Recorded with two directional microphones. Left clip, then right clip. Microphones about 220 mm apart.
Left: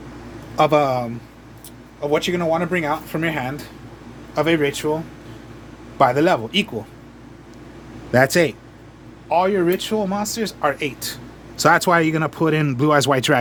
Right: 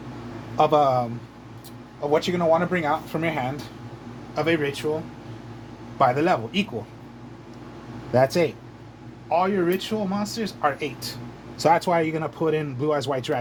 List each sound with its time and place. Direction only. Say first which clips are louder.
0.5 s speech: left 2 dB; 35° left (ahead or behind)
4.4 s speech: left 5 dB; 35° left (ahead or behind)
6.0 s speech: left 4 dB; 35° left (ahead or behind)
8.1 s speech: left 4 dB; 30° left (ahead or behind)